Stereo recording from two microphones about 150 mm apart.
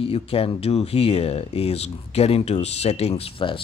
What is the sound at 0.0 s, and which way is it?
Speech, 40° left (ahead or behind).